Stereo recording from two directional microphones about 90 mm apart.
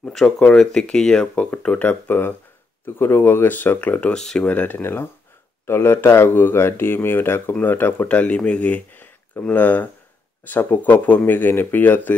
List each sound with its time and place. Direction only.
0.0 s speech: 5° left (ahead or behind)